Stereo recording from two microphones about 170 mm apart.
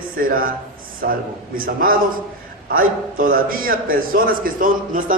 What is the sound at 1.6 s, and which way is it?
A man's voice, 60° right (ahead or behind).